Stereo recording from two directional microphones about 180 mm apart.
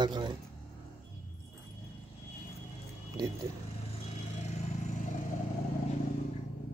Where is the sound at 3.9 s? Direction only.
40° left (ahead or behind).